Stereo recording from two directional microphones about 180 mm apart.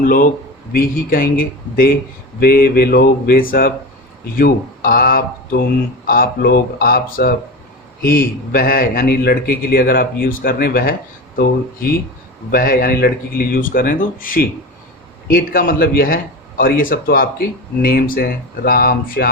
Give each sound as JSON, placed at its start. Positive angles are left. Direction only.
{"t": 0.0, "sound": "speech", "side_deg": 50}